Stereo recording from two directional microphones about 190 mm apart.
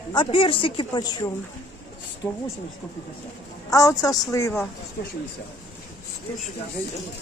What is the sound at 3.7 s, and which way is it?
Speech, 15° left (ahead or behind).